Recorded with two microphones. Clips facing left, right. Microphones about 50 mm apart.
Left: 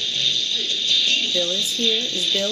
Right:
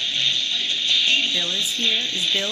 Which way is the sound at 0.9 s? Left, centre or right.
Right.